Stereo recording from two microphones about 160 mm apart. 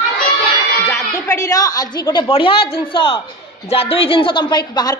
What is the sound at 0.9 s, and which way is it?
A woman's voice, 20° left (ahead or behind).